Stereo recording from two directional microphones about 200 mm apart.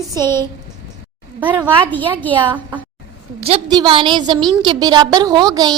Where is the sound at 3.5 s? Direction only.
25° right (ahead or behind).